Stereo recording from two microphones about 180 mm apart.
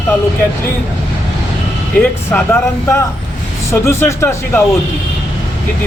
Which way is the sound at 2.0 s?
10° left (ahead or behind).